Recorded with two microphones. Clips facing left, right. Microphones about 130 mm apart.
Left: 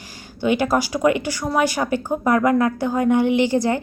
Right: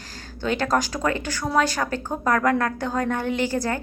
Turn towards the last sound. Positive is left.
turn(degrees=15)  # may be behind; listen again after turning